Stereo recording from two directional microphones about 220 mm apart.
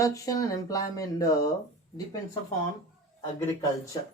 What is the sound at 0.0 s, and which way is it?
Speech, 15° left (ahead or behind).